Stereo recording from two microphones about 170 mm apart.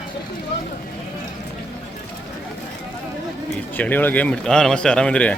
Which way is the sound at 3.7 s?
10° left (ahead or behind).